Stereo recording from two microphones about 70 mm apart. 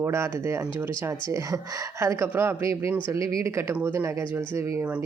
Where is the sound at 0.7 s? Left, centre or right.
Right.